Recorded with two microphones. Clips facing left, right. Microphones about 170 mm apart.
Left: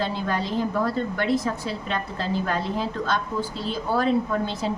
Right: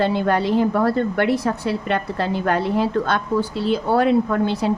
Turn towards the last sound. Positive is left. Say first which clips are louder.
# right 6 dB
turn(degrees=-65)  # may be behind; listen again after turning